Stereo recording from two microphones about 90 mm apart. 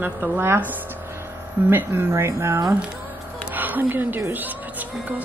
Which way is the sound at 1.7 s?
25° right (ahead or behind).